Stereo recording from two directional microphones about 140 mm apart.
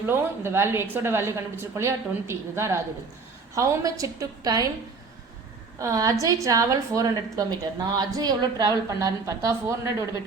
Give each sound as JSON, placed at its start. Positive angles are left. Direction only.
{"t": 0.0, "sound": "a woman's voice", "side_deg": -15}
{"t": 5.8, "sound": "a woman's voice", "side_deg": -25}